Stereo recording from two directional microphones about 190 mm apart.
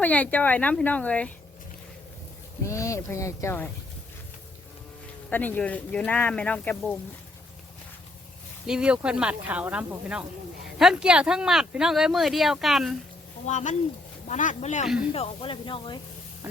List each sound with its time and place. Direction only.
0.0 s speech: 10° left (ahead or behind)
2.6 s speech: 15° left (ahead or behind)
5.3 s speech: 10° left (ahead or behind)
8.6 s speech: 5° right (ahead or behind)
13.5 s speech: 40° left (ahead or behind)